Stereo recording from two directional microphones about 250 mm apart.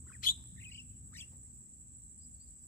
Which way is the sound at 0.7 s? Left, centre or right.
Centre.